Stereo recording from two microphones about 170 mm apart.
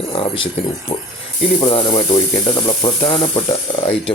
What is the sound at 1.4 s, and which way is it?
Speech, 30° left (ahead or behind).